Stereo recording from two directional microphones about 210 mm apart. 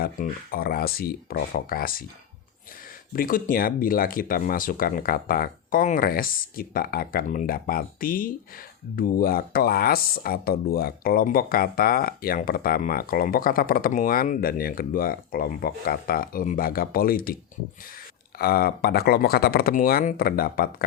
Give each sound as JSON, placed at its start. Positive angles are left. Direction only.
{"t": 0.0, "sound": "speech", "side_deg": 45}
{"t": 3.1, "sound": "speech", "side_deg": 40}
{"t": 18.3, "sound": "speech", "side_deg": 45}